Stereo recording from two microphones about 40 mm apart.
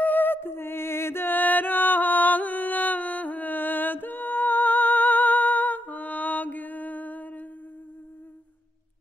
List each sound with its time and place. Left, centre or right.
0.0 s music: left
1.3 s music: left